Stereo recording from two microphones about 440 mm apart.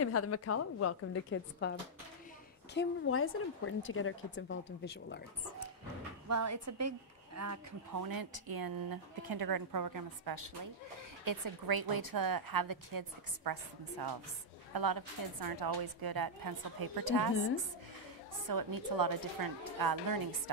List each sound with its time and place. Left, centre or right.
0.0 s a woman's voice: left
6.2 s speech: right
18.5 s speech: right